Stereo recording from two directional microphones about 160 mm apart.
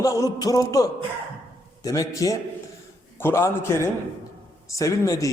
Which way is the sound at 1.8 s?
20° left (ahead or behind).